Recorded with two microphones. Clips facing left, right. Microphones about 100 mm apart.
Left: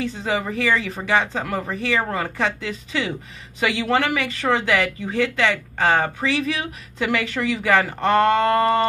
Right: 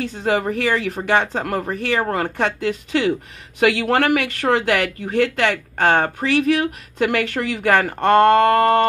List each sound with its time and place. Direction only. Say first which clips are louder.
0.0 s speech: right 4 dB; 60° right (ahead or behind)